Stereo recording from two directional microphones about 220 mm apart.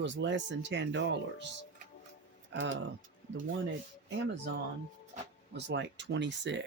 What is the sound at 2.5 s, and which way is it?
Speech, 60° right (ahead or behind).